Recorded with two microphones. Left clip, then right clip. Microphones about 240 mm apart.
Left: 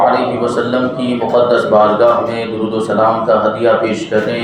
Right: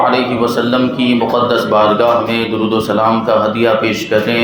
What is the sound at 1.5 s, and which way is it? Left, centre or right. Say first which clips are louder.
Speech: left 1 dB; right.